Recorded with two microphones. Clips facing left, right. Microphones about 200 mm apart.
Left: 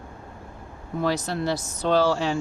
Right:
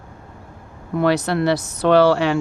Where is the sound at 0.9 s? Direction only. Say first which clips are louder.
Right 7 dB; 70° right (ahead or behind).